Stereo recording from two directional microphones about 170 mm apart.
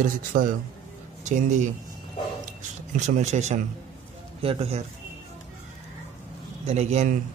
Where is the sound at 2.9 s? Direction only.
45° right (ahead or behind).